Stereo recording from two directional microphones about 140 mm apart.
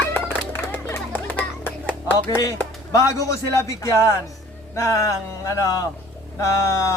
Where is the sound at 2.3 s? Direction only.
25° left (ahead or behind).